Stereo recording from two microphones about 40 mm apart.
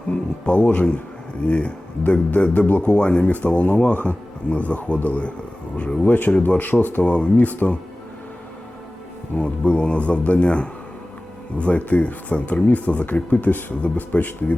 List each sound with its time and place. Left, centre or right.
0.4 s a man's voice: left
2.5 s speech: left
2.8 s a man's voice: left
6.1 s speech: left
7.1 s speech: left
7.4 s speech: left
9.4 s speech: left